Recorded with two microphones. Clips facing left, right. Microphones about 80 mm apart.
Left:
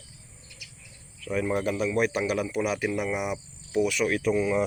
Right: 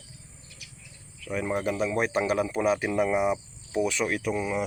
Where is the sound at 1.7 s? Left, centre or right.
Right.